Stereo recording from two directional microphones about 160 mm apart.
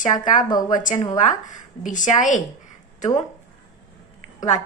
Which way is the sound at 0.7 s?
55° left (ahead or behind).